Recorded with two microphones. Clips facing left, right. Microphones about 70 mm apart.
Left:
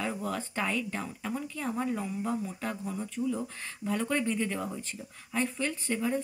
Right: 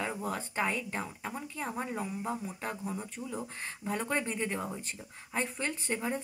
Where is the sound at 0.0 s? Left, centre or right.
Right.